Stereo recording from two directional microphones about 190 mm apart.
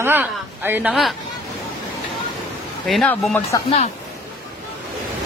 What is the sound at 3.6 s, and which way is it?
Speech, 35° left (ahead or behind).